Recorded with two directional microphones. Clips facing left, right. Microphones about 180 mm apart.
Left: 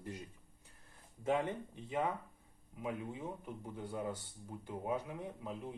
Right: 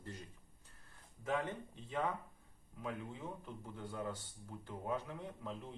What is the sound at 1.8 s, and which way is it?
A man's voice, 15° left (ahead or behind).